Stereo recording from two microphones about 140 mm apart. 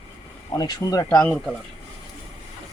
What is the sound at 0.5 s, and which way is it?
Speech, 25° left (ahead or behind).